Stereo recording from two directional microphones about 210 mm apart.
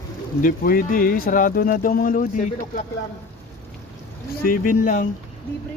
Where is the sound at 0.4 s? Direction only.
45° left (ahead or behind).